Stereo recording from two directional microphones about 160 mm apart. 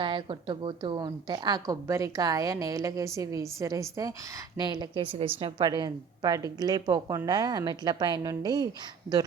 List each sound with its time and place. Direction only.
0.0 s a woman's voice: 30° right (ahead or behind)